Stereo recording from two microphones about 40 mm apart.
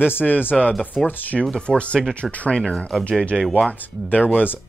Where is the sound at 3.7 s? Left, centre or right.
Left.